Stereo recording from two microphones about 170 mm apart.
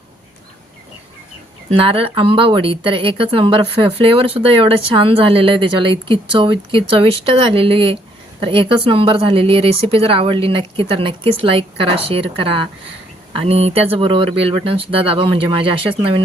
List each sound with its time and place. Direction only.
1.7 s speech: 35° right (ahead or behind)